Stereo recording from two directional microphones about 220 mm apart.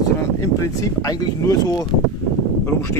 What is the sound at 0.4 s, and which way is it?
Speech, 15° left (ahead or behind).